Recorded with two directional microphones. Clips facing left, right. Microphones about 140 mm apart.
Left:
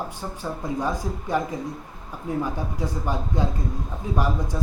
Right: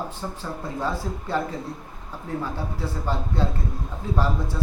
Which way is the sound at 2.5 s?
15° left (ahead or behind).